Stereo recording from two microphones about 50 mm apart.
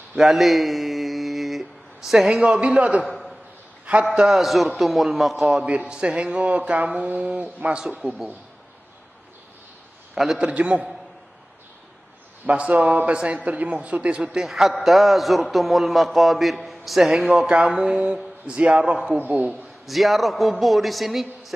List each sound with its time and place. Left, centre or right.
0.2 s mantra: centre
2.0 s speech: centre
2.6 s speech: right
4.1 s a man's voice: centre
5.7 s a man's voice: right
10.1 s speech: centre
10.5 s speech: right
12.4 s speech: right
14.4 s a man's voice: centre; by 18.9 s right
19.1 s a man's voice: right
19.9 s a man's voice: centre